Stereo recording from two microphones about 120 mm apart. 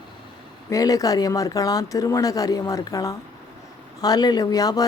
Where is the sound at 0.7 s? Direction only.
30° left (ahead or behind).